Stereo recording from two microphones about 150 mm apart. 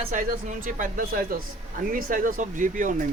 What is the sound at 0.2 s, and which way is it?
Speech, 60° right (ahead or behind).